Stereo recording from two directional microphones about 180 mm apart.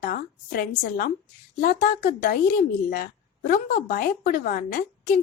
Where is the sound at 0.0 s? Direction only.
55° left (ahead or behind).